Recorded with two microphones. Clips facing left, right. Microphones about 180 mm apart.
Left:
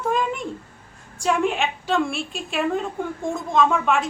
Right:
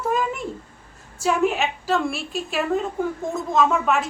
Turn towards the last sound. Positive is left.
turn(degrees=-5)  # may be behind; listen again after turning